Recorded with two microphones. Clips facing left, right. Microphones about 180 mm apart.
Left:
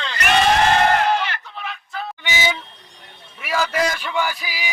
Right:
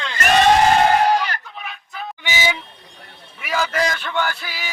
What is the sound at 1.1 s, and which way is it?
Crowd, 40° right (ahead or behind).